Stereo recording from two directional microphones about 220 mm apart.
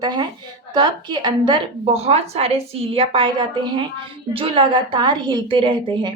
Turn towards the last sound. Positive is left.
turn(degrees=-20)  # may be behind; listen again after turning